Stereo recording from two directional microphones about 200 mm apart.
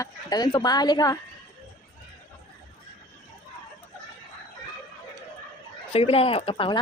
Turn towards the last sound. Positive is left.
turn(degrees=25)  # may be behind; listen again after turning